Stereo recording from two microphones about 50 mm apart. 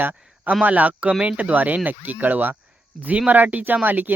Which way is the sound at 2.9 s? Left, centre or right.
Centre.